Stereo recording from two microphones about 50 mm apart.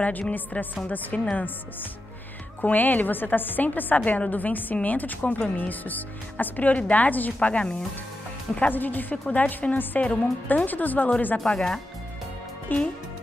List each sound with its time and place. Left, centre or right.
0.0 s a woman's voice: left
2.6 s a woman's voice: left
7.3 s speech: left
8.5 s a woman's voice: left
11.3 s speech: centre
12.7 s a woman's voice: left